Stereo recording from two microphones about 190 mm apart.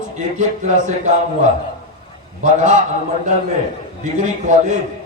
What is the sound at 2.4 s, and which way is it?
Speech, 40° right (ahead or behind).